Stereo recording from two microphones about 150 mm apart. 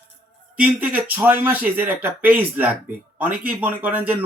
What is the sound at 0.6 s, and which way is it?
Speech, 10° right (ahead or behind).